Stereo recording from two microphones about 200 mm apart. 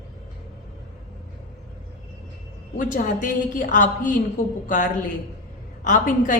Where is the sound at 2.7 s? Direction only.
40° left (ahead or behind).